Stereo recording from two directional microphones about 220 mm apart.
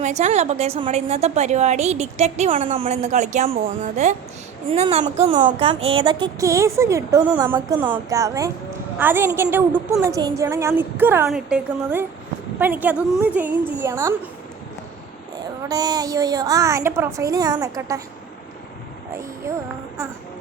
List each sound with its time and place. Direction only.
0.0 s a woman's voice: 30° right (ahead or behind); by 14.2 s 10° right (ahead or behind)
15.7 s speech: 15° right (ahead or behind)